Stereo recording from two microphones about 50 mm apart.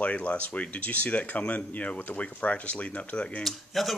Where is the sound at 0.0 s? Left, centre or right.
Left.